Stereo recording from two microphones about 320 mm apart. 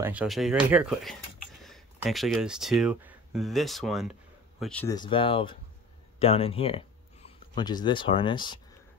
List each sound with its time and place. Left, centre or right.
0.0 s speech: centre